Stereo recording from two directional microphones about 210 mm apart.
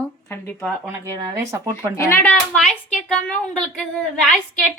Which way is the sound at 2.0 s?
10° left (ahead or behind).